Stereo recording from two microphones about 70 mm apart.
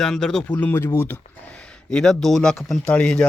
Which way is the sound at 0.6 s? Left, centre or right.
Left.